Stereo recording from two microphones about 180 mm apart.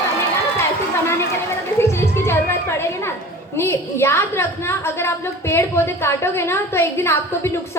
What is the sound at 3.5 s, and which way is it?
A woman's voice, 15° left (ahead or behind).